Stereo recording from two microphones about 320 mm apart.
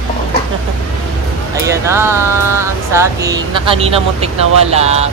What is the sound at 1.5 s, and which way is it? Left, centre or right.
Music, centre.